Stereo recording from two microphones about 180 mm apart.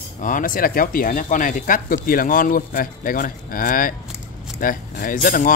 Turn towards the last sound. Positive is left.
turn(degrees=50)  # may be behind; listen again after turning